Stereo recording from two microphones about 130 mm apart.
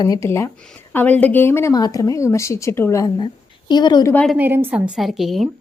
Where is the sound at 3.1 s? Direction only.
35° left (ahead or behind).